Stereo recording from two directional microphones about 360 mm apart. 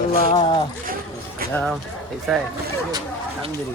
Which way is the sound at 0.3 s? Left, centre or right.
Centre.